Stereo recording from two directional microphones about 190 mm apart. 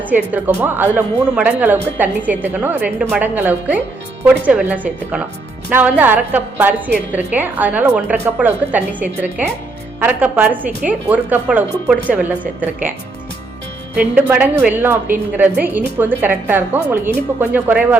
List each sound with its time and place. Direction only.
0.1 s a woman's voice: 10° right (ahead or behind)
13.9 s a woman's voice: 10° right (ahead or behind)